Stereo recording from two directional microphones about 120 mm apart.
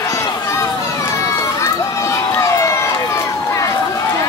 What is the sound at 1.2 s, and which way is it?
Run, 25° left (ahead or behind).